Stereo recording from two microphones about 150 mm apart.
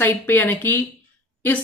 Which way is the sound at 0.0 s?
10° left (ahead or behind).